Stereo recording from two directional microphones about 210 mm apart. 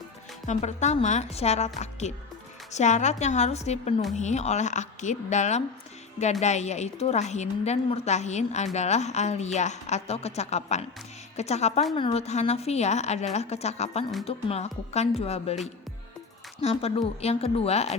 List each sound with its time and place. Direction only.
0.4 s a woman's voice: 35° left (ahead or behind)
16.6 s speech: 30° left (ahead or behind)